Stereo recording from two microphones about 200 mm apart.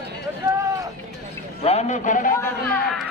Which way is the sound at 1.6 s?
30° left (ahead or behind).